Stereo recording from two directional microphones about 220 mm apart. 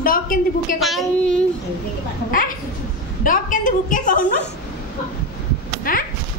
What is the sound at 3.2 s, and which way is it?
A woman's voice, 40° left (ahead or behind).